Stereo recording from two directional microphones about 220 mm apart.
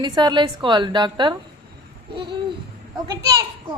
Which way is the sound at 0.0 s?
20° right (ahead or behind).